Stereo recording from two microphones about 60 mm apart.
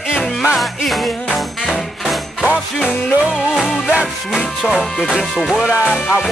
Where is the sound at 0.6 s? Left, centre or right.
Centre.